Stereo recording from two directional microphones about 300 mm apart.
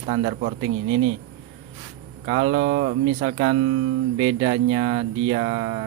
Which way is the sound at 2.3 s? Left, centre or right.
Right.